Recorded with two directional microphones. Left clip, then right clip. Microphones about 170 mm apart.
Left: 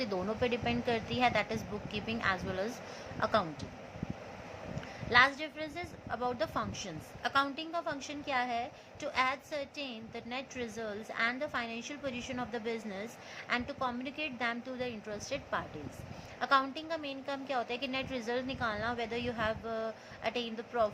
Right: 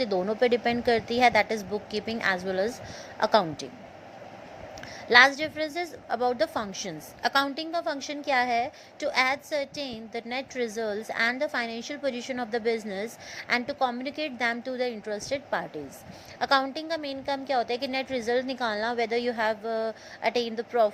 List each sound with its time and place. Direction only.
0.0 s a woman's voice: 30° right (ahead or behind)
5.0 s a woman's voice: 40° right (ahead or behind)